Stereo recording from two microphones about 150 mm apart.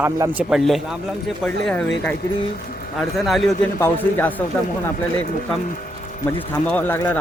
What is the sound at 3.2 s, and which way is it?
Speech, centre (ahead or behind).